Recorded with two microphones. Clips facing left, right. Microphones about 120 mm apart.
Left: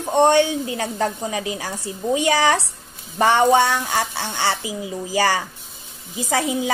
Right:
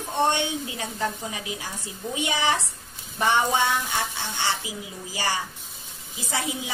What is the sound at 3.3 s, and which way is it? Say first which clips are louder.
Speech: left 6 dB; 35° left (ahead or behind).